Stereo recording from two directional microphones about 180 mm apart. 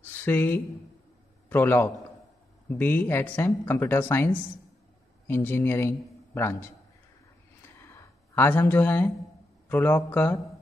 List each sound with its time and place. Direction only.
0.2 s speech: 10° left (ahead or behind)
7.9 s a sound: 15° left (ahead or behind)
9.7 s speech: 10° left (ahead or behind)